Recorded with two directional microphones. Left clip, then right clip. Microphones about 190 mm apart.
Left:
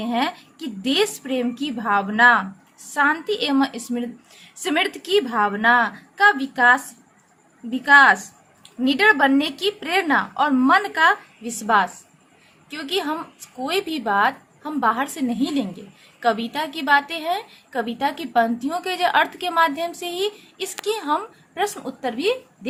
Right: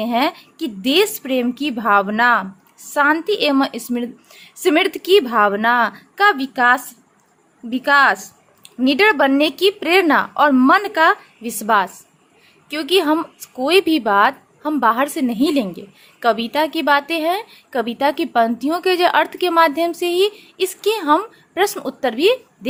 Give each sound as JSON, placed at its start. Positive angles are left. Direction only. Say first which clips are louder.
{"t": 0.0, "sound": "a woman's voice", "louder": "right 5 dB", "side_deg": -45}